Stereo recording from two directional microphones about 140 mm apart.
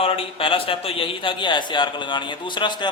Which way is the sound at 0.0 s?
40° left (ahead or behind).